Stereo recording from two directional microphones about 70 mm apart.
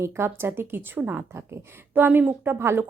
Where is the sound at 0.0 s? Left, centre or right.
Right.